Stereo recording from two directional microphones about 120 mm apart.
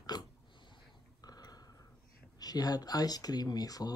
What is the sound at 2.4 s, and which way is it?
Speech, 35° left (ahead or behind).